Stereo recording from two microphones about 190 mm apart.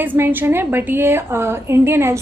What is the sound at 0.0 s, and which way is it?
A woman's voice, 10° right (ahead or behind).